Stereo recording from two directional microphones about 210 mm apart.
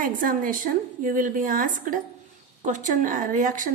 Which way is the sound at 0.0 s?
40° right (ahead or behind).